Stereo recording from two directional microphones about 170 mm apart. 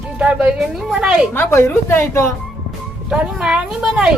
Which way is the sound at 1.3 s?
15° left (ahead or behind).